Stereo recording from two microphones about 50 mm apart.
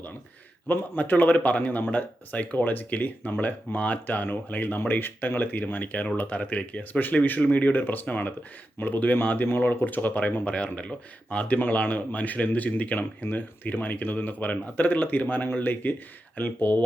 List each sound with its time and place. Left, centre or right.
0.7 s speech: left
7.5 s speech: left